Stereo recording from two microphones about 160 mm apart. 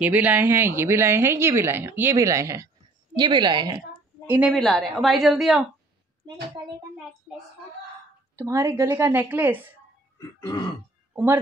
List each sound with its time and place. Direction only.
0.0 s a woman's voice: 10° right (ahead or behind); by 3.8 s 30° right (ahead or behind)
4.3 s a woman's voice: 5° right (ahead or behind)
8.4 s a woman's voice: 15° right (ahead or behind)
10.1 s throat clearing: 25° left (ahead or behind)